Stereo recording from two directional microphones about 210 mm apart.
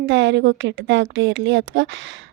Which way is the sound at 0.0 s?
60° right (ahead or behind).